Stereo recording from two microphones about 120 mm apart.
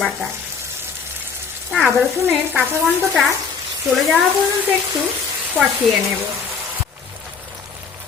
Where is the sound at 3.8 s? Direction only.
Centre (ahead or behind).